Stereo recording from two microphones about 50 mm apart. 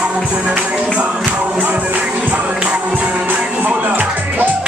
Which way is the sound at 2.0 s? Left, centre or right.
Right.